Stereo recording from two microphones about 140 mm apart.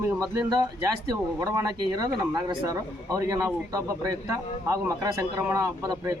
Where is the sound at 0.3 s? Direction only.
25° right (ahead or behind).